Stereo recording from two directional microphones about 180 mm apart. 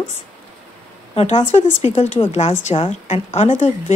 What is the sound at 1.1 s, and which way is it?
Speech, 35° left (ahead or behind).